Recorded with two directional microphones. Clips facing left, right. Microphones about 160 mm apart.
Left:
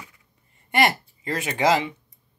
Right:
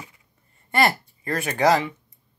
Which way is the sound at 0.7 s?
20° left (ahead or behind).